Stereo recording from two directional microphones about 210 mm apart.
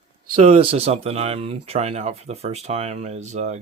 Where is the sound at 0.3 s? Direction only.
40° right (ahead or behind).